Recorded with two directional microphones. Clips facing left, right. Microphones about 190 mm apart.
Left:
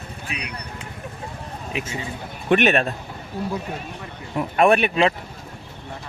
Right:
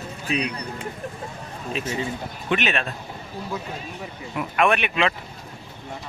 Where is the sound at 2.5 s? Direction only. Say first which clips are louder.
Left 7 dB; 50° left (ahead or behind).